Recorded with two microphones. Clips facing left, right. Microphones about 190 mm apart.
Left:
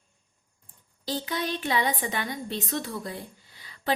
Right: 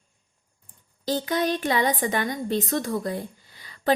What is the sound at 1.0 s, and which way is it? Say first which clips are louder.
Speech: right 6 dB; 50° right (ahead or behind).